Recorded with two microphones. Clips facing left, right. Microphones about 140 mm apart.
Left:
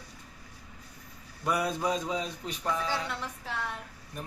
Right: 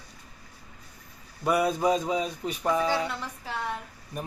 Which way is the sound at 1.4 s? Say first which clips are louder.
Right 5 dB; 5° right (ahead or behind).